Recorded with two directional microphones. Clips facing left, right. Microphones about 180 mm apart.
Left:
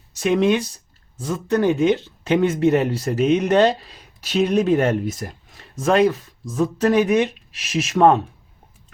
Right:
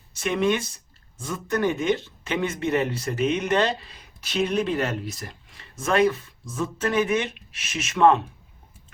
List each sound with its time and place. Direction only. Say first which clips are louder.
0.1 s speech: left 5 dB; 40° left (ahead or behind)